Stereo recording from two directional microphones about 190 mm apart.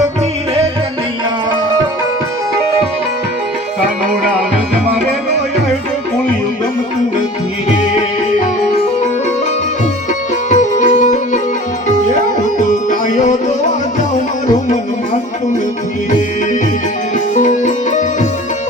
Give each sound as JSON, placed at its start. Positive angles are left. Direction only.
{"t": 10.5, "sound": "music", "side_deg": 40}
{"t": 12.5, "sound": "music", "side_deg": 40}
{"t": 14.4, "sound": "music", "side_deg": 40}
{"t": 17.3, "sound": "music", "side_deg": 40}